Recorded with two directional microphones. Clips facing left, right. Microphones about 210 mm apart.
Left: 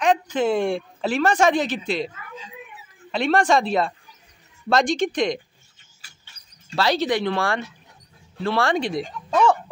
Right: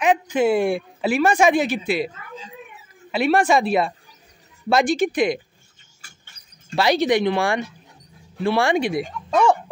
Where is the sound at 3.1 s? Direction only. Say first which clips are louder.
Right 1 dB; 5° right (ahead or behind).